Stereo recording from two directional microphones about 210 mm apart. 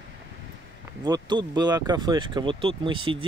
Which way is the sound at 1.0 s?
20° right (ahead or behind).